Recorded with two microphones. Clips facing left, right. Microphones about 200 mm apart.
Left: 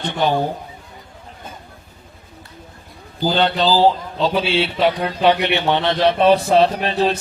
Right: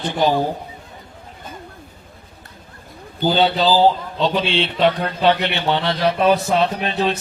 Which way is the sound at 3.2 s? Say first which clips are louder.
Right 1 dB; 5° right (ahead or behind).